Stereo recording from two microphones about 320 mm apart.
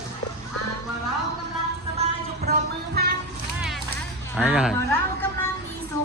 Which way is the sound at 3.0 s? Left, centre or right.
Right.